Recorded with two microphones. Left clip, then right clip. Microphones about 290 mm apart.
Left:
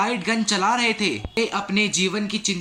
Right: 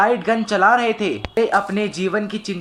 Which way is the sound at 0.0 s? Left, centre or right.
Centre.